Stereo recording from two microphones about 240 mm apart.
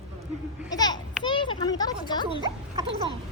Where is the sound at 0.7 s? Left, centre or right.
Centre.